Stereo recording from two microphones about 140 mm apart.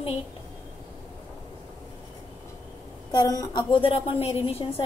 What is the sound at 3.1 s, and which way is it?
A woman's voice, 25° left (ahead or behind).